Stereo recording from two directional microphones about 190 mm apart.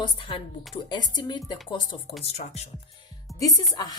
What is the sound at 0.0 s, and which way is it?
A woman's voice, 25° left (ahead or behind).